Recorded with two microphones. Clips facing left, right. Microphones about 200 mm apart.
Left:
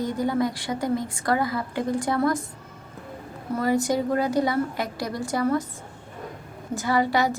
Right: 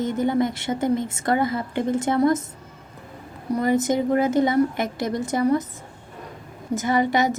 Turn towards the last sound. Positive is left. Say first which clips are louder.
# right 2 dB
turn(degrees=-20)  # may be behind; listen again after turning